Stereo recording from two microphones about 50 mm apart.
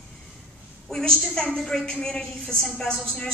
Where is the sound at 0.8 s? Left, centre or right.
Centre.